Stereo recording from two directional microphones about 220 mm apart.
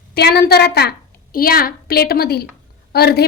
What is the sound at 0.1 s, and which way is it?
A woman's voice, 45° left (ahead or behind).